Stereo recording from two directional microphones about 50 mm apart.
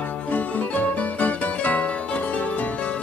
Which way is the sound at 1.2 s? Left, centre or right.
Left.